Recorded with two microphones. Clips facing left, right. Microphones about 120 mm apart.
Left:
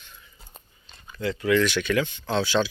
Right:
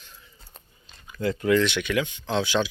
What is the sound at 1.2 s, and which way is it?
Speech, 40° right (ahead or behind).